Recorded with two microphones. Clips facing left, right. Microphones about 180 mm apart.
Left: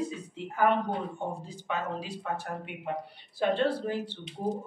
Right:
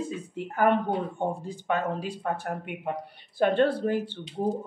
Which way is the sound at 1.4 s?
55° right (ahead or behind).